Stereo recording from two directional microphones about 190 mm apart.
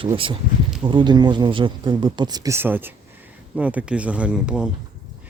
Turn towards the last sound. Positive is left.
turn(degrees=-5)  # may be behind; listen again after turning